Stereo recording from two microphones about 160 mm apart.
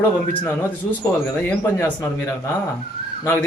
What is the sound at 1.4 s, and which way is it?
Speech, 10° left (ahead or behind).